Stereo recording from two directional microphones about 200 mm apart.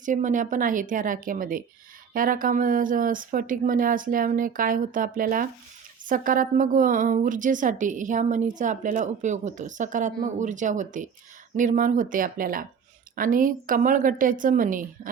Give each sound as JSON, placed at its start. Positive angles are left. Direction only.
{"t": 0.0, "sound": "a woman's voice", "side_deg": -40}